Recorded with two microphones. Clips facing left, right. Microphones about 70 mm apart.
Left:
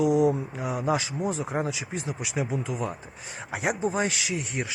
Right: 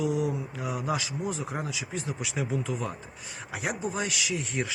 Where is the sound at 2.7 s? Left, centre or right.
Left.